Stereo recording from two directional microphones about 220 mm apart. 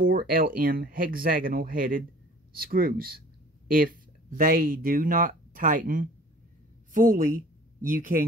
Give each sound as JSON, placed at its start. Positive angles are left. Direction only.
{"t": 0.0, "sound": "speech", "side_deg": -40}